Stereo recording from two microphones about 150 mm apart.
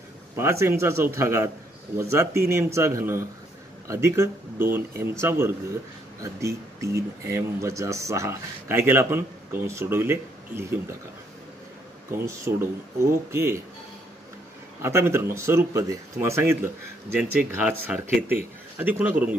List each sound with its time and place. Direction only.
0.4 s speech: 15° right (ahead or behind)
12.1 s speech: 20° right (ahead or behind)
14.8 s speech: 15° right (ahead or behind)